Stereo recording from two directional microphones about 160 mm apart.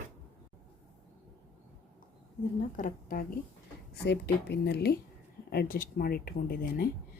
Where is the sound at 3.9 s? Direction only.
90° left.